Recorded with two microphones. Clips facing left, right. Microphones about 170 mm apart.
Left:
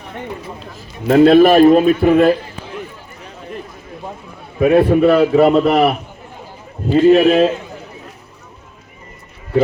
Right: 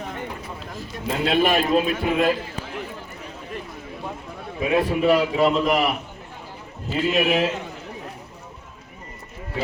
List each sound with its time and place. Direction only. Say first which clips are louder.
1.2 s a man's voice: left 13 dB; 40° left (ahead or behind)
4.7 s a man's voice: left 7 dB; 40° left (ahead or behind)